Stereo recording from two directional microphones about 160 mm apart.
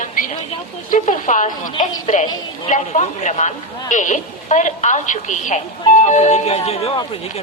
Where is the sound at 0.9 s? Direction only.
55° left (ahead or behind).